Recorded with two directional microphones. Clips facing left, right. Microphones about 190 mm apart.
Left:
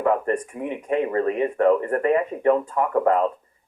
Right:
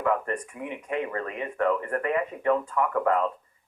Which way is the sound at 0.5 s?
35° left (ahead or behind).